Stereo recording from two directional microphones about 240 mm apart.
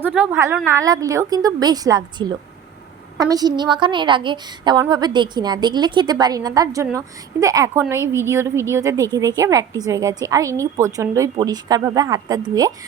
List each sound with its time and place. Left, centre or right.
0.0 s a woman's voice: centre